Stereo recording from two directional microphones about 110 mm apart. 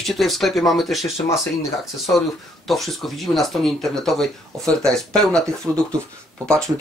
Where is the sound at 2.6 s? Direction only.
Centre (ahead or behind).